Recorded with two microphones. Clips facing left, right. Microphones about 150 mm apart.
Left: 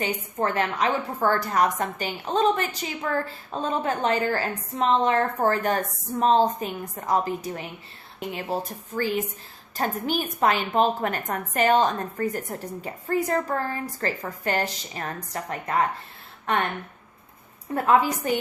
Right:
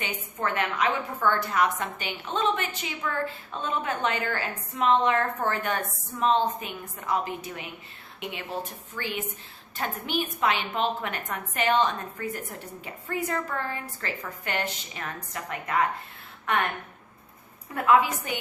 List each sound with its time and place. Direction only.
0.0 s a woman's voice: 35° left (ahead or behind)
17.7 s a woman's voice: 35° left (ahead or behind)